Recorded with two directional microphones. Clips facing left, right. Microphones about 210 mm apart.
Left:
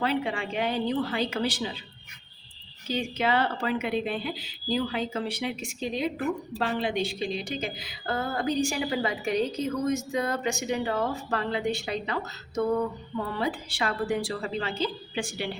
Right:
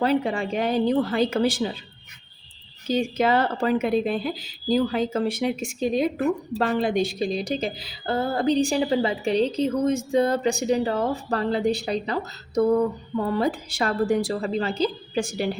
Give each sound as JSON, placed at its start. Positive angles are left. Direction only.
{"t": 0.0, "sound": "a woman's voice", "side_deg": -40}
{"t": 2.8, "sound": "a woman's voice", "side_deg": -45}